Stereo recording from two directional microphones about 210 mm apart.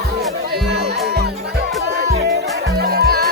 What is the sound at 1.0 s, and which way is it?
Music, 50° right (ahead or behind).